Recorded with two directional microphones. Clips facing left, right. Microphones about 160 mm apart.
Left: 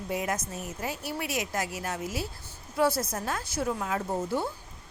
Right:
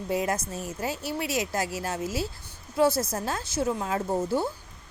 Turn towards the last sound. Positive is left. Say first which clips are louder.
# right 3 dB
turn(degrees=-30)  # may be behind; listen again after turning